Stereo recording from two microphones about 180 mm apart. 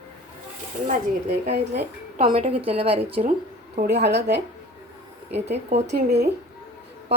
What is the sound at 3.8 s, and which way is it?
Speech, 70° right (ahead or behind).